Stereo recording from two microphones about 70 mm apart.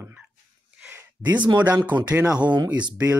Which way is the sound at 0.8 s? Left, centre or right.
Right.